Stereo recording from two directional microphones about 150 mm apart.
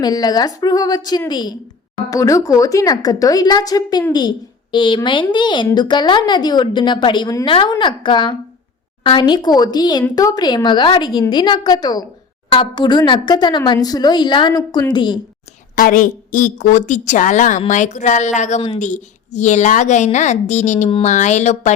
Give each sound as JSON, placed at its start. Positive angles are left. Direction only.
{"t": 0.0, "sound": "a woman's voice", "side_deg": 25}
{"t": 15.7, "sound": "a woman's voice", "side_deg": 60}